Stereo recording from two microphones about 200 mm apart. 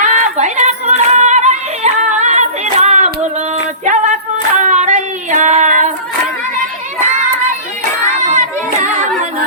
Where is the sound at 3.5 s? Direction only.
40° right (ahead or behind).